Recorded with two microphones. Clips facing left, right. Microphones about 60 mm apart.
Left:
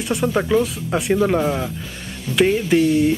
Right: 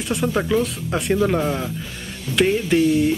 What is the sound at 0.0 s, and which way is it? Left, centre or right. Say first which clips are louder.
Speech: left 2 dB; centre.